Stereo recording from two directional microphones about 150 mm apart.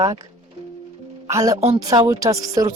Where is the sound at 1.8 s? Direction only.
25° right (ahead or behind).